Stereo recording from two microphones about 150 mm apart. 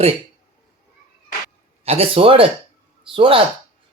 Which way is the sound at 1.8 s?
40° right (ahead or behind).